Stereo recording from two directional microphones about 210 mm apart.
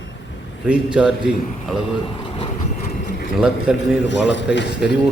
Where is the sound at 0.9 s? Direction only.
5° right (ahead or behind).